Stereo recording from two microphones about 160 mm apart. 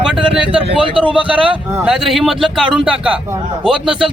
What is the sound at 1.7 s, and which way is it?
Speech, 5° right (ahead or behind).